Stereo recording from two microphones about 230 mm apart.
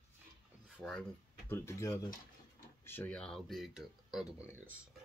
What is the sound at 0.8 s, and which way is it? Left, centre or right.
Speech, centre.